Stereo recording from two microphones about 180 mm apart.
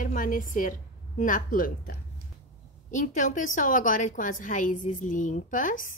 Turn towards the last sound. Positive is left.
turn(degrees=45)  # may be behind; listen again after turning